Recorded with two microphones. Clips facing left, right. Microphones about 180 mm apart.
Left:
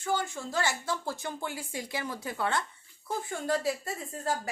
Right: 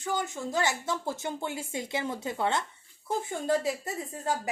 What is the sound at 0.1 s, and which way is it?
A woman's voice, 20° right (ahead or behind).